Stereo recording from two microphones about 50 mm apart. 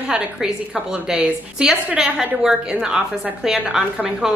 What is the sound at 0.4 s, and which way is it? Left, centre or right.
A woman's voice, centre.